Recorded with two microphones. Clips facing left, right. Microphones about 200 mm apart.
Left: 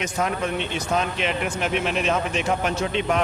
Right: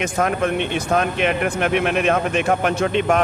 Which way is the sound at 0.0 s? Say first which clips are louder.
Right 5 dB; 55° right (ahead or behind).